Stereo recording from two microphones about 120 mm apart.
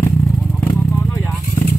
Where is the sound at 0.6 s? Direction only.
25° left (ahead or behind).